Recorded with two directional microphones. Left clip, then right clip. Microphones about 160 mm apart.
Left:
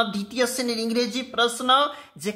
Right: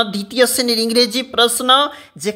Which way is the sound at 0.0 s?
35° right (ahead or behind).